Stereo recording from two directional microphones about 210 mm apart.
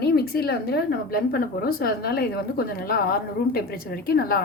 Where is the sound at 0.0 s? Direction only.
50° left (ahead or behind).